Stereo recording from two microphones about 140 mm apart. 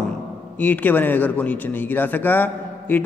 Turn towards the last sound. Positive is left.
turn(degrees=15)  # may be behind; listen again after turning